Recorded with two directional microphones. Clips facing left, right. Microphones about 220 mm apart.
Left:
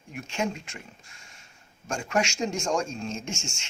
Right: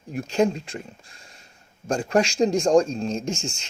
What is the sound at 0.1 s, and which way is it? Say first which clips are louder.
Speech: right 9 dB; 35° right (ahead or behind).